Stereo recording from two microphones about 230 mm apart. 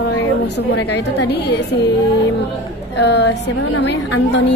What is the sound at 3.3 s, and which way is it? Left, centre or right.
Speech, left.